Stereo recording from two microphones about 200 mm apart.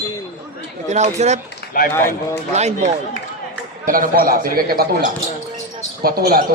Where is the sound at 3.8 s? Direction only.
45° right (ahead or behind).